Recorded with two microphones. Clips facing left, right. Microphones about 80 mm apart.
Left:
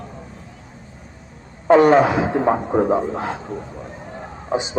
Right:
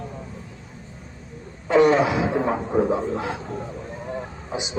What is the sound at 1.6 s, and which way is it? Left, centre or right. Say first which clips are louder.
A man's voice: left 5 dB; left.